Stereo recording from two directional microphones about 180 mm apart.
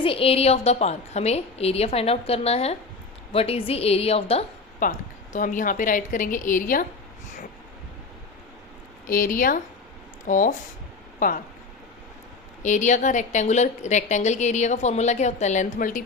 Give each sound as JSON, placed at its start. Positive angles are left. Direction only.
{"t": 0.0, "sound": "a woman's voice", "side_deg": 30}
{"t": 4.8, "sound": "a woman's voice", "side_deg": 45}
{"t": 9.0, "sound": "a woman's voice", "side_deg": 50}
{"t": 12.6, "sound": "a woman's voice", "side_deg": 40}